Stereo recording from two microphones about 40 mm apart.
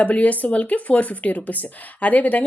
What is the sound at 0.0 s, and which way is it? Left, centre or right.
A woman's voice, left.